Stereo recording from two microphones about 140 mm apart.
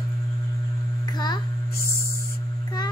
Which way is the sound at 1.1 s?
30° left (ahead or behind).